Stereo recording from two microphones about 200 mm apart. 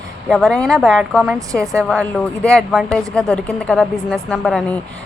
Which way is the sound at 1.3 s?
15° right (ahead or behind).